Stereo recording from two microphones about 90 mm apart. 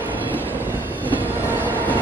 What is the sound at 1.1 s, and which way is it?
Train, 20° right (ahead or behind).